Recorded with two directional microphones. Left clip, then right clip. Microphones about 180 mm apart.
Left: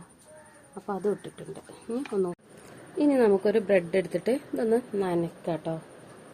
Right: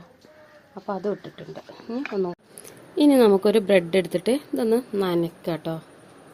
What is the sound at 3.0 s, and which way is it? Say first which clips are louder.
A woman's voice: right 5 dB; 45° right (ahead or behind).